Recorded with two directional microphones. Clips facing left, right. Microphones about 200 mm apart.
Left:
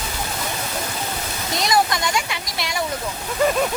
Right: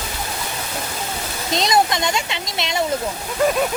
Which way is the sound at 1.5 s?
20° right (ahead or behind).